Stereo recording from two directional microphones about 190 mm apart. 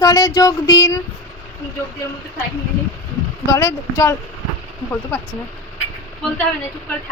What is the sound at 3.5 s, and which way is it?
Speech, 10° left (ahead or behind).